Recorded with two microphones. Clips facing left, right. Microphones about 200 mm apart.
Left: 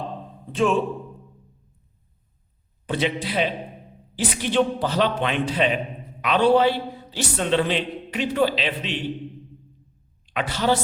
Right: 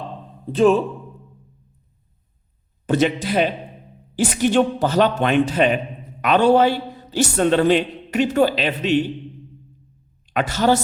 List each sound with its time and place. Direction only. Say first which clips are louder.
0.5 s a man's voice: right 6 dB; 40° right (ahead or behind)
2.8 s a man's voice: right 6 dB; 45° right (ahead or behind)
10.2 s a woman's voice: right 4 dB; 45° right (ahead or behind)